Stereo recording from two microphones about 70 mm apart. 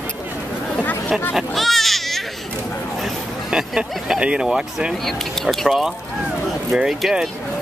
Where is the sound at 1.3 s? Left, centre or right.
Centre.